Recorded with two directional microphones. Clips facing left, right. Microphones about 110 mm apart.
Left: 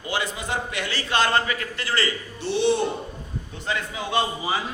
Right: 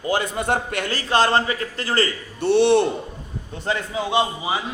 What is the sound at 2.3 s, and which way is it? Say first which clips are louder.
Speech: right 6 dB; 60° right (ahead or behind).